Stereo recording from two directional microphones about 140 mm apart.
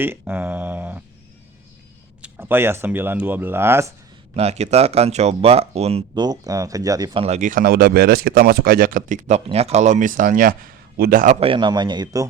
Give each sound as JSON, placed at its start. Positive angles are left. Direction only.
{"t": 0.0, "sound": "speech", "side_deg": -15}
{"t": 2.2, "sound": "speech", "side_deg": -15}
{"t": 4.4, "sound": "speech", "side_deg": -50}
{"t": 6.1, "sound": "speech", "side_deg": -30}
{"t": 7.1, "sound": "a man's voice", "side_deg": -40}
{"t": 7.3, "sound": "a man's voice", "side_deg": -70}
{"t": 11.3, "sound": "a man's voice", "side_deg": -40}